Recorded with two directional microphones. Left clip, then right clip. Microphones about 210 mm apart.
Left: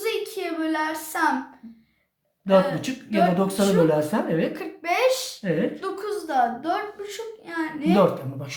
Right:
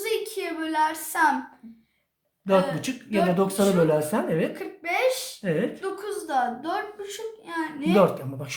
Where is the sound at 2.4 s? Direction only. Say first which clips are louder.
Left 3 dB; 30° right (ahead or behind).